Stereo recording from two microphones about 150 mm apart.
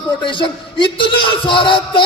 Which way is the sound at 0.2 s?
35° left (ahead or behind).